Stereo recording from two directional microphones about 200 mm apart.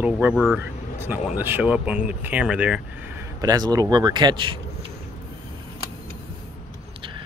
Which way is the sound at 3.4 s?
20° right (ahead or behind).